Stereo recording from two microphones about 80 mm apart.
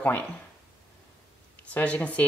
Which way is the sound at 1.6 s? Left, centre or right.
Centre.